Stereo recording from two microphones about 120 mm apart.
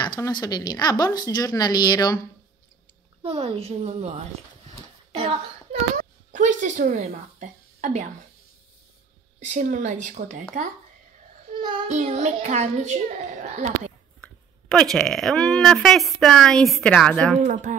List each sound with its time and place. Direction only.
0.0 s speech: 35° left (ahead or behind)
3.2 s a woman's voice: 60° right (ahead or behind)
5.1 s a sound: 50° right (ahead or behind)
5.9 s speech: 90° right
9.4 s speech: 90° right
11.9 s a child's voice: 75° right (ahead or behind)
14.2 s a woman's voice: 5° left (ahead or behind)
17.7 s speech: 90° right